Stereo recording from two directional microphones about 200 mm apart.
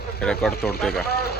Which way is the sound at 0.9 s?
50° left (ahead or behind).